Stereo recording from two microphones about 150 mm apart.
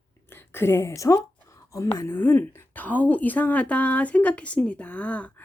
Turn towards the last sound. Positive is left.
turn(degrees=10)  # may be behind; listen again after turning